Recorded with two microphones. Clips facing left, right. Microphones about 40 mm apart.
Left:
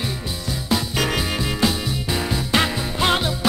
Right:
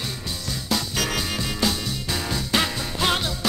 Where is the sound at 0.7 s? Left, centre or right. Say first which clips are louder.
Left 4 dB; centre.